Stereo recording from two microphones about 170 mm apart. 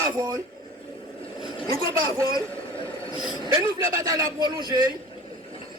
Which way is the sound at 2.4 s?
10° left (ahead or behind).